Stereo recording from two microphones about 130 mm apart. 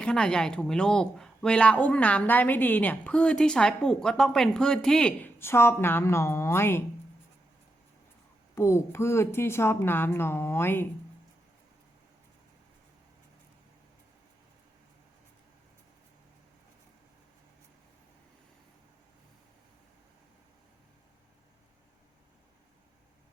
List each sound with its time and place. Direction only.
0.0 s a woman's voice: 5° left (ahead or behind)
5.4 s speech: 20° left (ahead or behind)
8.5 s speech: 20° left (ahead or behind)